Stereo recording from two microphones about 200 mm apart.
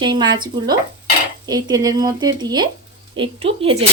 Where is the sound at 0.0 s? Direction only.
20° right (ahead or behind).